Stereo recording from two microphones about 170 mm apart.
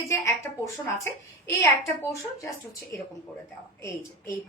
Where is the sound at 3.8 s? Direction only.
15° left (ahead or behind).